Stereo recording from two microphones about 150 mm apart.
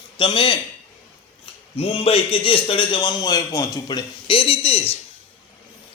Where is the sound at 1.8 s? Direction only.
35° left (ahead or behind).